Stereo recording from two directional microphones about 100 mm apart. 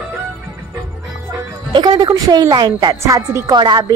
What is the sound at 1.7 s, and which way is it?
A woman's voice, 45° right (ahead or behind).